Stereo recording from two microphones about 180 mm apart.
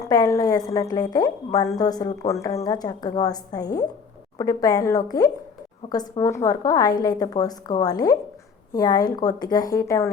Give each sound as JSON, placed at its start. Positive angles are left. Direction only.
{"t": 0.0, "sound": "a woman's voice", "side_deg": 20}